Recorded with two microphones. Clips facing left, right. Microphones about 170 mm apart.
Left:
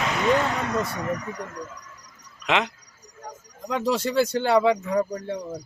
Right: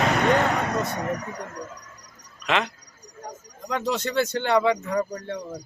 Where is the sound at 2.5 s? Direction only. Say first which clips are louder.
Left 1 dB; 15° left (ahead or behind).